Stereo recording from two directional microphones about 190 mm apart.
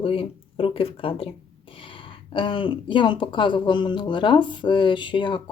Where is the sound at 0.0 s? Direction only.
30° left (ahead or behind).